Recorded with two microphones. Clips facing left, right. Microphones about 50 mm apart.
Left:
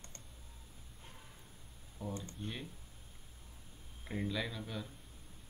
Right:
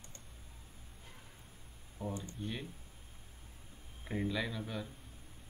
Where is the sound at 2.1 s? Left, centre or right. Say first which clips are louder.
Right 1 dB; right.